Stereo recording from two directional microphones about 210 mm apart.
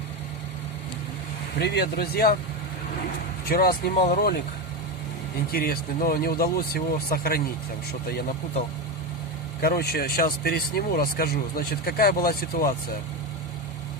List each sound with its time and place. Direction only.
1.5 s speech: 50° left (ahead or behind)
3.5 s speech: 45° left (ahead or behind)
5.5 s speech: 45° left (ahead or behind)
9.6 s speech: 45° left (ahead or behind)